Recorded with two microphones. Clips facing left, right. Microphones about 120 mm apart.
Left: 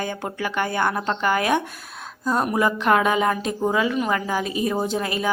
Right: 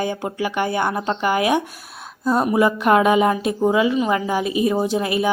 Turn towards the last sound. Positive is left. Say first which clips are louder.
# right 4 dB
turn(degrees=-15)  # may be behind; listen again after turning